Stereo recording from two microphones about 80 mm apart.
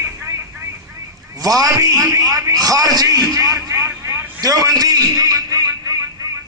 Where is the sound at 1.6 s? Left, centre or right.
Right.